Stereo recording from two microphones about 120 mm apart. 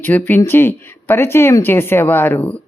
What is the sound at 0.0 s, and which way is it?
Speech, 15° left (ahead or behind).